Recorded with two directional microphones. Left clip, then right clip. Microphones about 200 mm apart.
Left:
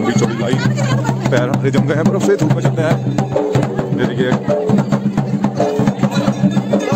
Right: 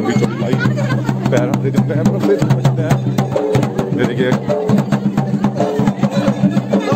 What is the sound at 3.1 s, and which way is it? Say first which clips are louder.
Music: even; 60° right (ahead or behind).